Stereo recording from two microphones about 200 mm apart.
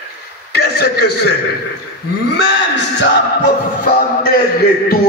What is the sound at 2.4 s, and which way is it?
Speech, 65° left (ahead or behind).